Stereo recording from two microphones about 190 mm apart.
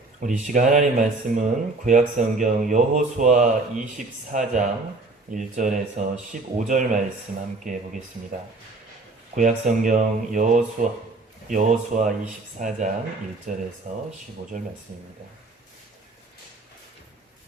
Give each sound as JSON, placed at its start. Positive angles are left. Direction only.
{"t": 0.2, "sound": "speech", "side_deg": -40}
{"t": 9.3, "sound": "speech", "side_deg": -40}